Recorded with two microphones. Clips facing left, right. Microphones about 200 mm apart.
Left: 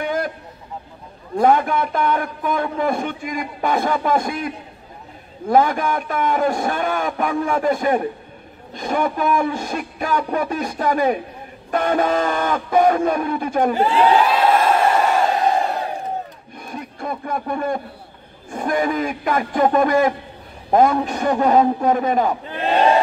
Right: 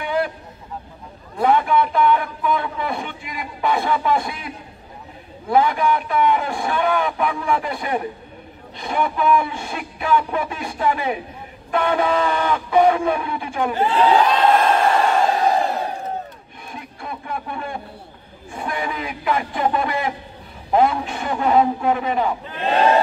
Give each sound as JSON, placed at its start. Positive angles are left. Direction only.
{"t": 0.0, "sound": "vehicle", "side_deg": 45}
{"t": 1.3, "sound": "a man's voice", "side_deg": 45}
{"t": 5.5, "sound": "a man's voice", "side_deg": 45}
{"t": 13.7, "sound": "crowd", "side_deg": 10}
{"t": 16.6, "sound": "a sound", "side_deg": 45}
{"t": 18.5, "sound": "a man's voice", "side_deg": 45}